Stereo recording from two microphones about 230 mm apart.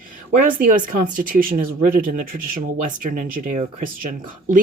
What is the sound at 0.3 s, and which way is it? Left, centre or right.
Speech, right.